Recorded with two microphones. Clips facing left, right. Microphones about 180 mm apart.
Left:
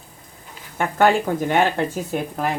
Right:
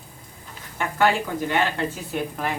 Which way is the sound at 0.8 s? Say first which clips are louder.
Left 4 dB; 45° left (ahead or behind).